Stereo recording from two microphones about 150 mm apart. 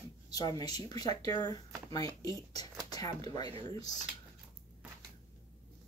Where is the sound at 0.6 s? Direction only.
25° left (ahead or behind).